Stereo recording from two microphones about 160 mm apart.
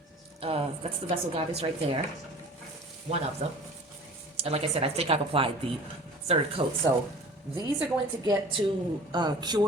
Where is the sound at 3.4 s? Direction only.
40° right (ahead or behind).